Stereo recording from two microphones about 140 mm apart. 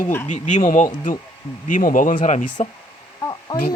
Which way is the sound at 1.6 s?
75° left (ahead or behind).